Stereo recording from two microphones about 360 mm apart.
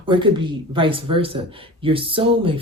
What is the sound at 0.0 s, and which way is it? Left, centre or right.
Speech, centre.